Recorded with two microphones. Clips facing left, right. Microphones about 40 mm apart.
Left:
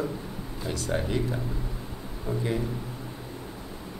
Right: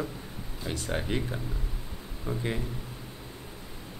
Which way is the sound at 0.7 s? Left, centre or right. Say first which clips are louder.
Left 3 dB; right.